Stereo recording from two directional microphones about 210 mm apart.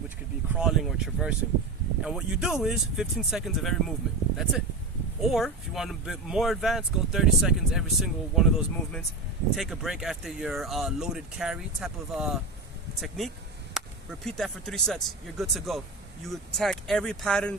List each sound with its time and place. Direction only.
0.6 s speech: centre (ahead or behind)
5.2 s speech: centre (ahead or behind)